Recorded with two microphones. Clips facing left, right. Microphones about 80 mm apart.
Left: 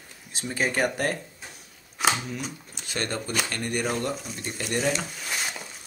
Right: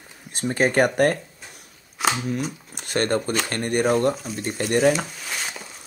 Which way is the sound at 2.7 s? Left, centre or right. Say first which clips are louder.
Right 9 dB; right.